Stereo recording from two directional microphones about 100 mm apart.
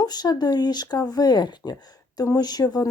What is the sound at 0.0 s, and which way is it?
Speech, 40° left (ahead or behind).